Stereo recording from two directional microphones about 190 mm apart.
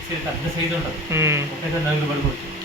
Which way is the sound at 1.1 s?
15° right (ahead or behind).